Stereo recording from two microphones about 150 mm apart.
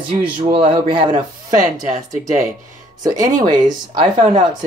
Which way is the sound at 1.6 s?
55° right (ahead or behind).